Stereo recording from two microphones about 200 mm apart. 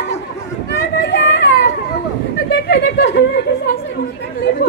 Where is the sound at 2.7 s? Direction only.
55° left (ahead or behind).